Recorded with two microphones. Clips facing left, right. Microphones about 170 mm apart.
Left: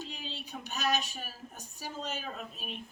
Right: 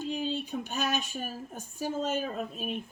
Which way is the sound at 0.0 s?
50° right (ahead or behind).